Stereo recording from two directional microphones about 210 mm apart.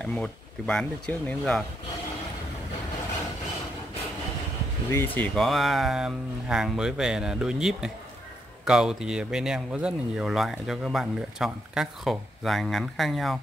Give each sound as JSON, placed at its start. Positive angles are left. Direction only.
{"t": 0.0, "sound": "speech", "side_deg": 5}
{"t": 4.9, "sound": "speech", "side_deg": 10}